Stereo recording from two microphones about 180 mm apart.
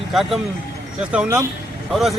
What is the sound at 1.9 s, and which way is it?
Speech, centre (ahead or behind).